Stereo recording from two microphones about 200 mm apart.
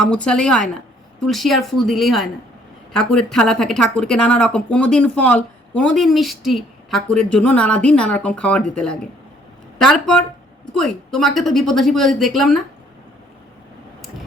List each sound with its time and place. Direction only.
0.0 s speech: 5° left (ahead or behind)